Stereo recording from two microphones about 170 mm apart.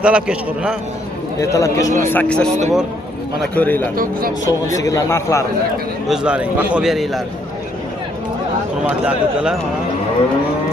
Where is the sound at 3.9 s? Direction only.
55° right (ahead or behind).